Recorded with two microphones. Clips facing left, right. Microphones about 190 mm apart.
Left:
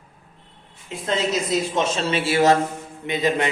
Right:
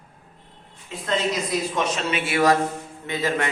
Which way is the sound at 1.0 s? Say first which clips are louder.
Left 2 dB; 25° left (ahead or behind).